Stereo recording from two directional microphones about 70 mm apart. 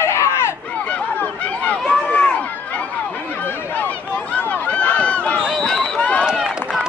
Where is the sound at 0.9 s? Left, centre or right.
Left.